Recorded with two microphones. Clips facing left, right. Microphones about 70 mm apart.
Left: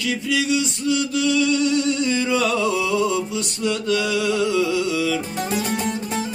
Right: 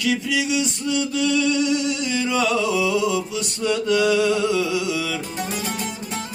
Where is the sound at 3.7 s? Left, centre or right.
Right.